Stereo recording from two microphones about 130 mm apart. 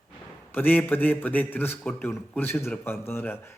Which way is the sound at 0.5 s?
15° left (ahead or behind).